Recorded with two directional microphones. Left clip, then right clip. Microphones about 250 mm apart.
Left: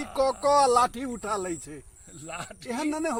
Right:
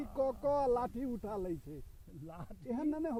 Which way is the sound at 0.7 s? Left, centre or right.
Centre.